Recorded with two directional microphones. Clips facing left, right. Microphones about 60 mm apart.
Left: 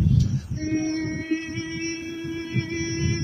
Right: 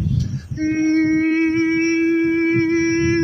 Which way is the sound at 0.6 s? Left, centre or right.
Right.